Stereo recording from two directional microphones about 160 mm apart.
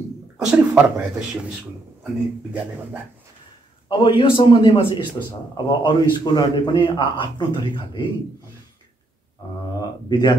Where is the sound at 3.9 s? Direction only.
30° left (ahead or behind).